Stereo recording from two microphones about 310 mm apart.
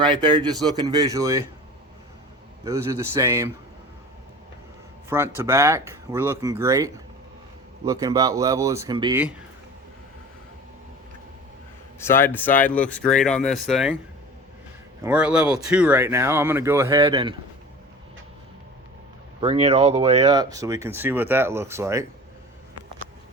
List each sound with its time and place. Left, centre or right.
0.0 s speech: centre
2.6 s speech: centre
5.0 s a man's voice: centre
11.9 s speech: centre
15.0 s speech: centre
19.4 s speech: centre